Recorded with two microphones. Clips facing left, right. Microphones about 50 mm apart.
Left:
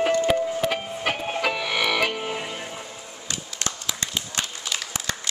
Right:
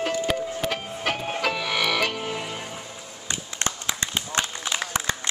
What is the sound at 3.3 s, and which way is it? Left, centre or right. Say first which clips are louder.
Run: right 2 dB; right.